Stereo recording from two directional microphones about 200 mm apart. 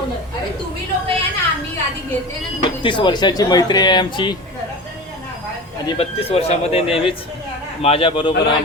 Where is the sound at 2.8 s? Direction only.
25° left (ahead or behind).